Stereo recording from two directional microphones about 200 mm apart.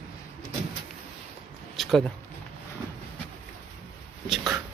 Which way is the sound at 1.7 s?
Centre (ahead or behind).